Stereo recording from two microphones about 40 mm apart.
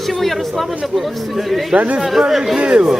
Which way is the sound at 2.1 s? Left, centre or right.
Centre.